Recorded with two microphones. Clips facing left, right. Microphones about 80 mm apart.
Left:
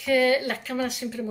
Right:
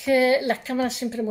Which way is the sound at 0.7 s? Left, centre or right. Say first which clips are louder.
Right 3 dB; right.